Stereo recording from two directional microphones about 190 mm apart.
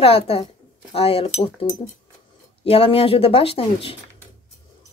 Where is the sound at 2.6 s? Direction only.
30° left (ahead or behind).